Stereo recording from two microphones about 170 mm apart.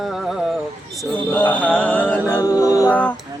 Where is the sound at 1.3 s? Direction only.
10° left (ahead or behind).